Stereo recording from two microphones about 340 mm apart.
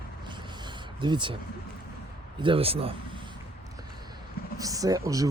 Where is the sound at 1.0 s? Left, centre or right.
Centre.